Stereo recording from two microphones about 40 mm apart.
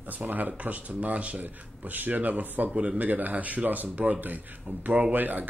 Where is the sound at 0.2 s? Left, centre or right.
Right.